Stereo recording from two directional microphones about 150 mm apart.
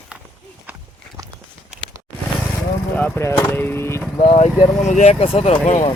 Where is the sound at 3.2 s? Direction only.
15° left (ahead or behind).